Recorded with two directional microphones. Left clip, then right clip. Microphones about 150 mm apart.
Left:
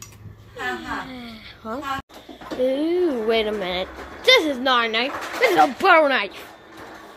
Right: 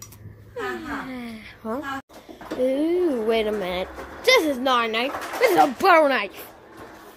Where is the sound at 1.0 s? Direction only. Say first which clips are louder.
Right 1 dB; 30° right (ahead or behind).